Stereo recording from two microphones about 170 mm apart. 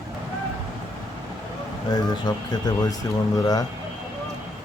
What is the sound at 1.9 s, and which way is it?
Speech, 25° left (ahead or behind).